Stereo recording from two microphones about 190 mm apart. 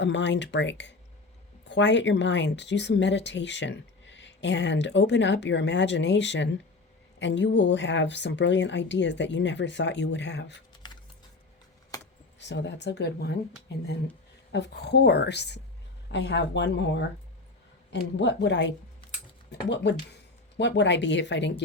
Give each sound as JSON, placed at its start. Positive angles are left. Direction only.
{"t": 0.0, "sound": "speech", "side_deg": 70}
{"t": 12.4, "sound": "a woman's voice", "side_deg": 65}
{"t": 14.5, "sound": "a woman's voice", "side_deg": 60}